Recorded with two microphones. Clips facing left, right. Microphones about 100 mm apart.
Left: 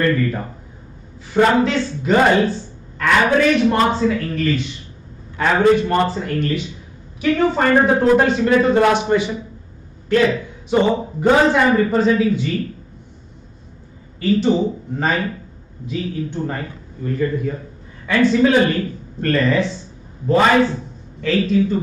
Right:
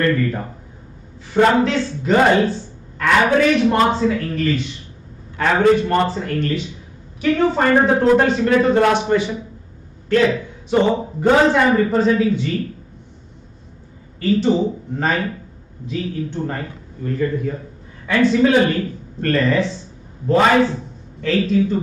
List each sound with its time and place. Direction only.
0.1 s a man's voice: centre (ahead or behind)
9.1 s a man's voice: 15° left (ahead or behind); by 12.5 s centre (ahead or behind)
14.2 s a man's voice: centre (ahead or behind)